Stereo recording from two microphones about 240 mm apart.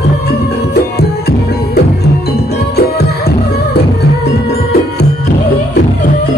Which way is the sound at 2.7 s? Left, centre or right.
Left.